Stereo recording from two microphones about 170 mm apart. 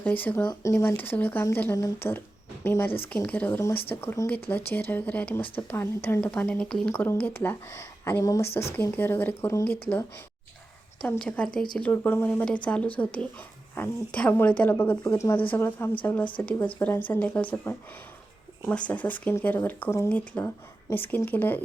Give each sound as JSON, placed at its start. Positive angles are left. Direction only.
{"t": 0.0, "sound": "a woman's voice", "side_deg": 10}